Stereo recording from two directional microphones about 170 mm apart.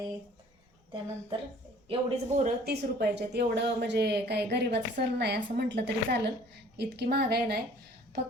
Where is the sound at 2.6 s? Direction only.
70° right (ahead or behind).